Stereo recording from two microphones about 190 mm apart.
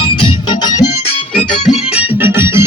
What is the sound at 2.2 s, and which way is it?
Music, 15° right (ahead or behind).